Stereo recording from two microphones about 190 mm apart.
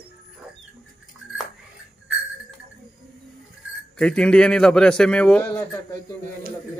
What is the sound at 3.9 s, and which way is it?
A man's voice, 5° left (ahead or behind).